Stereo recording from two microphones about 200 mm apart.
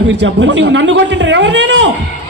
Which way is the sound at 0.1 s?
60° right (ahead or behind).